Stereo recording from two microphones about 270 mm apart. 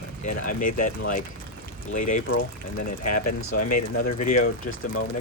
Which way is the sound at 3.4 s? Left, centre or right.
Left.